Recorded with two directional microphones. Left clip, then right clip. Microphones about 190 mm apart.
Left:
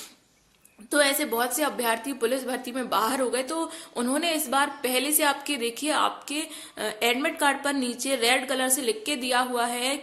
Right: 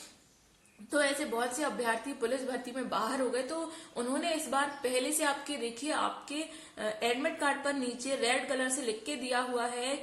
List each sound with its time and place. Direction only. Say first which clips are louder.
0.9 s a woman's voice: left 7 dB; 35° left (ahead or behind)